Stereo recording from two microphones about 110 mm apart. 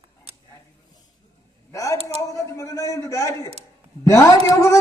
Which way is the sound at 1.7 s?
30° left (ahead or behind).